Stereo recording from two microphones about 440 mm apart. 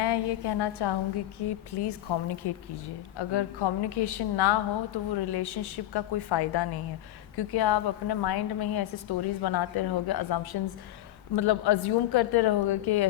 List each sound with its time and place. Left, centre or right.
0.0 s a woman's voice: left